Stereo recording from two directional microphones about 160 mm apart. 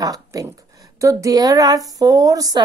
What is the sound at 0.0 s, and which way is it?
Speech, 20° right (ahead or behind).